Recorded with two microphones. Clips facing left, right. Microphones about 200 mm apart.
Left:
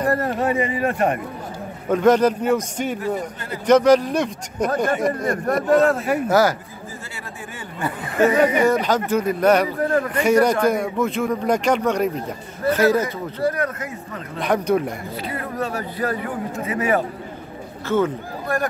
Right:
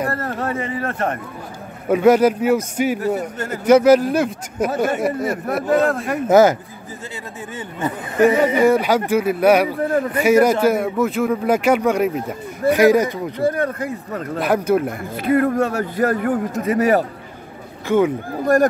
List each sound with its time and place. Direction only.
0.1 s speech: 15° left (ahead or behind)
1.9 s a man's voice: 10° right (ahead or behind)
6.2 s speech: 20° right (ahead or behind)
7.8 s a man's voice: 10° right (ahead or behind)
13.4 s speech: 30° right (ahead or behind)
14.4 s speech: 5° right (ahead or behind)
15.2 s speech: 50° right (ahead or behind)
17.8 s a man's voice: 15° right (ahead or behind)
18.4 s speech: 40° right (ahead or behind)